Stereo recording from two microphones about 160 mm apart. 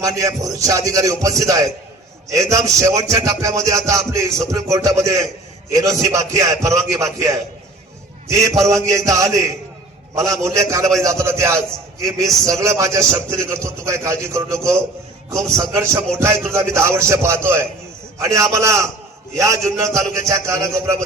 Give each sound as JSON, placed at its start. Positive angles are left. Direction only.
{"t": 0.0, "sound": "music", "side_deg": -20}
{"t": 11.0, "sound": "a man's voice", "side_deg": -20}
{"t": 12.0, "sound": "music", "side_deg": -20}
{"t": 15.5, "sound": "a man's voice", "side_deg": -15}
{"t": 18.2, "sound": "music", "side_deg": -20}